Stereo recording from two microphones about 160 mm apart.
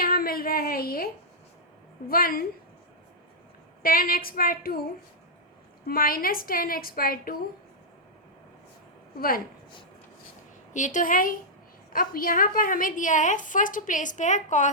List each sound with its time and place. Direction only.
0.0 s a sound: 65° left (ahead or behind)
2.0 s a woman's voice: 65° left (ahead or behind)
3.8 s a woman's voice: 65° left (ahead or behind)
5.9 s a woman's voice: 65° left (ahead or behind)
10.8 s a woman's voice: 50° left (ahead or behind)